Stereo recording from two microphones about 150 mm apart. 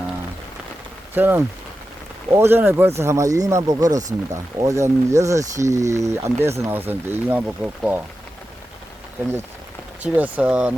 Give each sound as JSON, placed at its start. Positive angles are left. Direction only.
{"t": 1.1, "sound": "speech", "side_deg": -15}
{"t": 10.0, "sound": "speech", "side_deg": -10}